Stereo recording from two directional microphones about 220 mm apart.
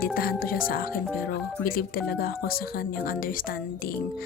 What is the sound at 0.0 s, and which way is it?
A woman's voice, 40° left (ahead or behind).